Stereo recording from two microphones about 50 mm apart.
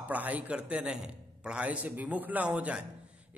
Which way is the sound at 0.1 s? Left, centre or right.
Right.